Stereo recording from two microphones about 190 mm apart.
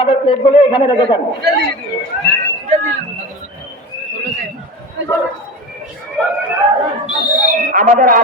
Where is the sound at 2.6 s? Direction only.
40° right (ahead or behind).